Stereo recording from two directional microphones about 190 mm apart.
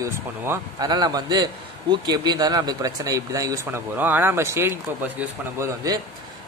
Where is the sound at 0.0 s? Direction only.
15° right (ahead or behind).